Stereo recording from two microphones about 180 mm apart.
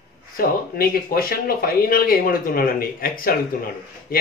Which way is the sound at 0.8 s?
55° left (ahead or behind).